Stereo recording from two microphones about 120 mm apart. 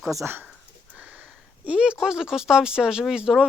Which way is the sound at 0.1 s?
20° right (ahead or behind).